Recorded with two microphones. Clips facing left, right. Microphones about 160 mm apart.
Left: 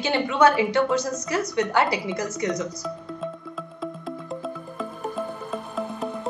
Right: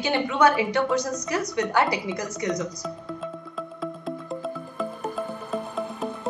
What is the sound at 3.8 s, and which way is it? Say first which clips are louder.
Music: even; centre (ahead or behind).